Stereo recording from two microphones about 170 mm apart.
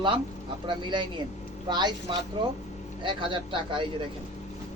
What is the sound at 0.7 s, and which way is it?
Speech, 30° right (ahead or behind).